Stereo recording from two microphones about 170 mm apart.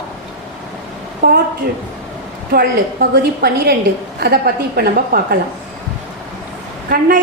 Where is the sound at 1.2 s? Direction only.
70° right (ahead or behind).